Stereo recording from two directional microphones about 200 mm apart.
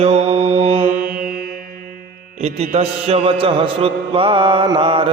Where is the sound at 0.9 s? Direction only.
45° right (ahead or behind).